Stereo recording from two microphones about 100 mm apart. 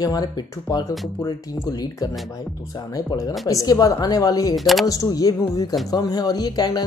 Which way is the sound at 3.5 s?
35° left (ahead or behind).